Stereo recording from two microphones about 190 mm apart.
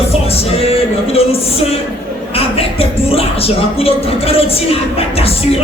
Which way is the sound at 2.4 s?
30° left (ahead or behind).